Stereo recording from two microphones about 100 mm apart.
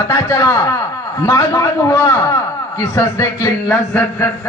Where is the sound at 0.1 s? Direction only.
30° left (ahead or behind).